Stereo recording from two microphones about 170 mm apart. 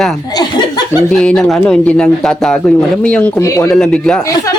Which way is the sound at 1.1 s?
Centre (ahead or behind).